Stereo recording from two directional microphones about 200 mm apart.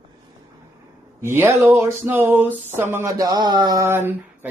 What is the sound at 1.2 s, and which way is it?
Speech, 10° right (ahead or behind).